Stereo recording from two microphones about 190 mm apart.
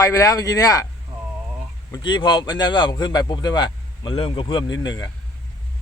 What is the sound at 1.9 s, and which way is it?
Speech, 25° left (ahead or behind).